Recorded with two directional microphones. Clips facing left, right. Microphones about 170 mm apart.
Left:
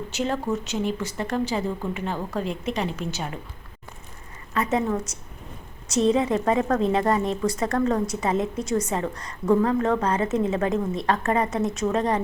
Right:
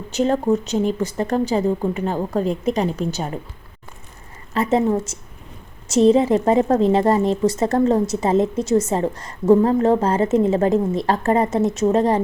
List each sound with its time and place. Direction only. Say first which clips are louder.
0.2 s speech: right 8 dB; 40° right (ahead or behind)
4.5 s a woman's voice: right 6 dB; 30° right (ahead or behind)